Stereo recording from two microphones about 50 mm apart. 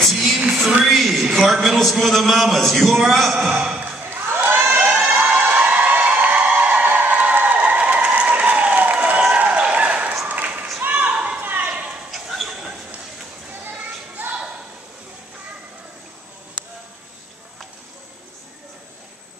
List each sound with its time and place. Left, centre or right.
0.1 s music: centre
0.8 s a man's voice: centre
3.3 s a man's voice: centre
4.1 s crowd: right
4.7 s crowd: right
5.4 s a sound: right
11.4 s clip-clop: right
11.7 s a sound: centre
12.1 s a sound: centre
13.7 s children playing: right